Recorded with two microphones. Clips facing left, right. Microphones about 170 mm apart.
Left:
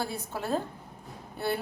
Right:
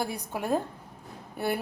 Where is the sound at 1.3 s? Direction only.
15° right (ahead or behind).